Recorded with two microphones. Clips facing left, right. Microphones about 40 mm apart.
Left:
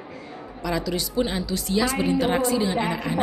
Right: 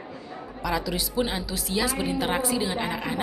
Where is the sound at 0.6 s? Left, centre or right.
Centre.